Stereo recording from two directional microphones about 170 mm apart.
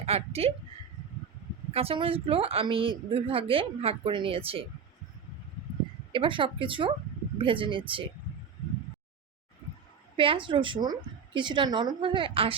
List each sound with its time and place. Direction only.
0.0 s a woman's voice: 35° right (ahead or behind)
1.7 s a woman's voice: 35° right (ahead or behind)
6.1 s a woman's voice: 30° right (ahead or behind)
10.2 s a woman's voice: 30° right (ahead or behind)